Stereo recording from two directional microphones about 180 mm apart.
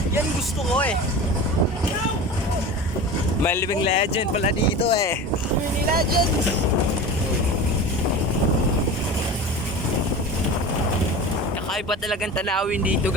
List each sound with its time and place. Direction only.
0.7 s speech: 5° left (ahead or behind)
3.4 s speech: 15° left (ahead or behind)
3.8 s speech: 35° left (ahead or behind)
5.8 s speech: 55° right (ahead or behind)
11.7 s speech: centre (ahead or behind)